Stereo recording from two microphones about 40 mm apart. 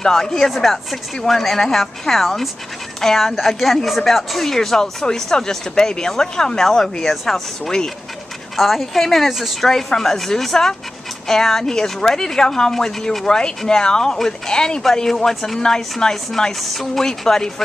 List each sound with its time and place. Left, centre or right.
0.0 s speech: centre
0.5 s a woman's voice: centre
8.5 s a woman's voice: centre
16.6 s a woman's voice: centre